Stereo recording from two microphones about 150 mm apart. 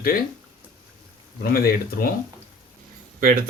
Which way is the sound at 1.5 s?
85° left.